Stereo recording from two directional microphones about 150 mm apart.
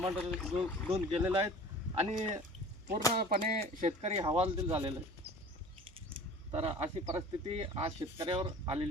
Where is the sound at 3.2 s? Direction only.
75° right (ahead or behind); by 4.2 s 50° right (ahead or behind).